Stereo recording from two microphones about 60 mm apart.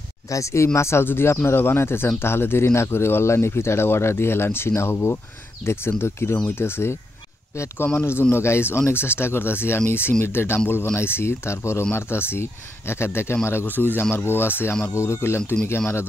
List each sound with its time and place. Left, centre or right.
0.3 s speech: left
13.7 s speech: left
15.0 s speech: left